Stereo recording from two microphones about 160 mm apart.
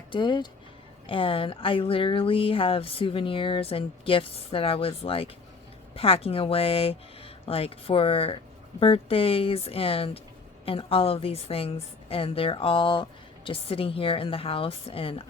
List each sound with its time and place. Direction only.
0.1 s a woman's voice: 30° left (ahead or behind)